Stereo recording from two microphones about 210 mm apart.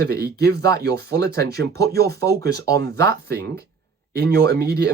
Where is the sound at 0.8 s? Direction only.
50° right (ahead or behind).